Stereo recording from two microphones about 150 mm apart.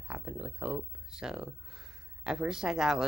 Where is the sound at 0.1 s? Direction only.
10° right (ahead or behind).